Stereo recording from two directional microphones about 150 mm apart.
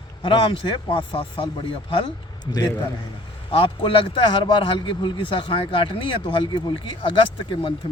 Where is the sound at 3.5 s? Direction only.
35° left (ahead or behind).